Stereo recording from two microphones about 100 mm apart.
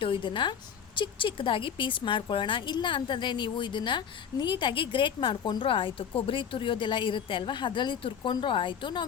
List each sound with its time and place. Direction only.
0.0 s a woman's voice: 60° left (ahead or behind)